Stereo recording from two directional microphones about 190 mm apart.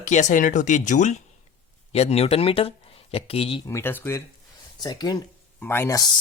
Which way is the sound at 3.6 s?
10° left (ahead or behind).